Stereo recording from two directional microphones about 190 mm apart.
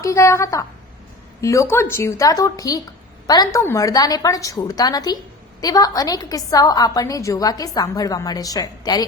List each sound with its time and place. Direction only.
0.0 s a woman's voice: 15° left (ahead or behind)